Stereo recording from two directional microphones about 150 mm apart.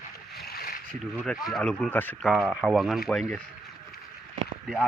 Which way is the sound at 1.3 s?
Centre (ahead or behind).